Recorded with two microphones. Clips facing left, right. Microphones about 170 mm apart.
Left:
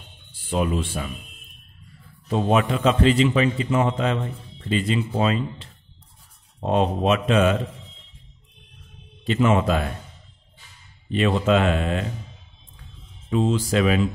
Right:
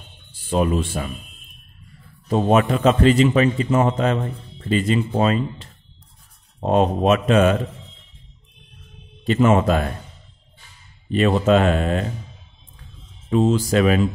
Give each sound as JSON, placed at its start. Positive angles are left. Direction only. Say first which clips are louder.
{"t": 0.5, "sound": "a man's voice", "louder": "right 4 dB", "side_deg": -45}
{"t": 2.2, "sound": "a man's voice", "louder": "right 3 dB", "side_deg": -45}
{"t": 9.2, "sound": "a man's voice", "louder": "right 3 dB", "side_deg": -45}
{"t": 11.1, "sound": "a man's voice", "louder": "right 3 dB", "side_deg": -45}
{"t": 13.3, "sound": "a man's voice", "louder": "right 4 dB", "side_deg": -40}